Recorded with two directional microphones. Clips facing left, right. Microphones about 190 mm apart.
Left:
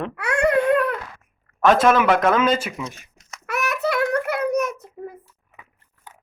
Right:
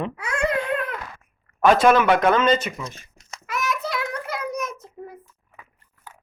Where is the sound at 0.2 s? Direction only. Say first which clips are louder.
Left 7 dB; 70° left (ahead or behind).